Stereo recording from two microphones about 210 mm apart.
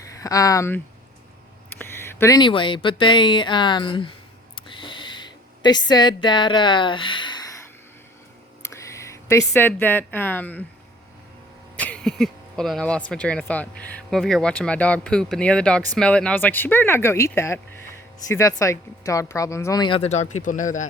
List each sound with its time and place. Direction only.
0.2 s speech: 15° left (ahead or behind)
1.8 s speech: 10° left (ahead or behind)
4.5 s a sound: 25° left (ahead or behind)
8.6 s a sound: 15° left (ahead or behind)
9.5 s speech: 10° left (ahead or behind)
11.8 s speech: 5° left (ahead or behind); by 20.8 s 40° left (ahead or behind)